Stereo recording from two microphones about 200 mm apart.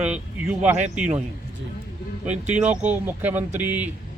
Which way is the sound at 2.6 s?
5° right (ahead or behind).